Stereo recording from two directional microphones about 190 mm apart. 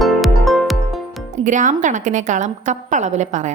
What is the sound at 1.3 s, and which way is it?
A woman's voice, 40° right (ahead or behind).